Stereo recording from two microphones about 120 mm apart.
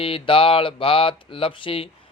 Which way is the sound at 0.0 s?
50° left (ahead or behind).